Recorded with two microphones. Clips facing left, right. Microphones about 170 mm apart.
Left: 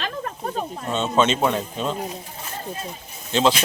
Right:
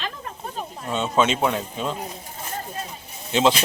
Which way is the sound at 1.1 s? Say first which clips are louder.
Left 1 dB; 10° right (ahead or behind).